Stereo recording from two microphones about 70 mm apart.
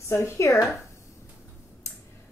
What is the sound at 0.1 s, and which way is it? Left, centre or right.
Speech, left.